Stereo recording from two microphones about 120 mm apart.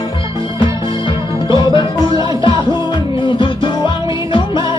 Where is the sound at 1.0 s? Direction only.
40° left (ahead or behind).